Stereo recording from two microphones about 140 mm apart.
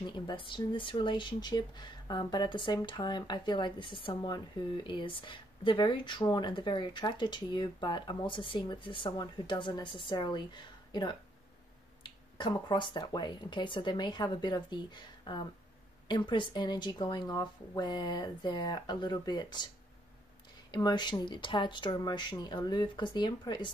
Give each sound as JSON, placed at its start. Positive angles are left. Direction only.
{"t": 0.0, "sound": "speech", "side_deg": 35}
{"t": 12.4, "sound": "speech", "side_deg": 35}
{"t": 20.7, "sound": "speech", "side_deg": 30}